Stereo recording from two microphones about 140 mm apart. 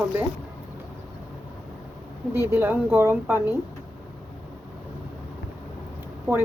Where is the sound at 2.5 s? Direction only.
15° right (ahead or behind).